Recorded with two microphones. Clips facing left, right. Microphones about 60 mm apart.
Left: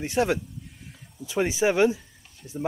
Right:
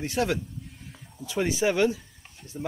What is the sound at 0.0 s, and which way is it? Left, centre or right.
Speech, centre.